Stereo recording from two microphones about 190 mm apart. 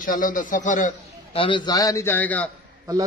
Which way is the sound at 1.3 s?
25° left (ahead or behind).